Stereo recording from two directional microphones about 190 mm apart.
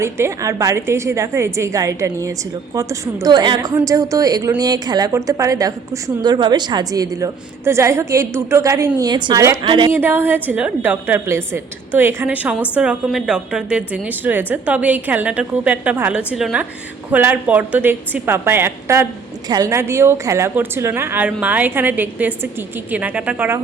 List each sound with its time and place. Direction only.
0.0 s a woman's voice: 15° right (ahead or behind)
9.9 s a woman's voice: 10° right (ahead or behind)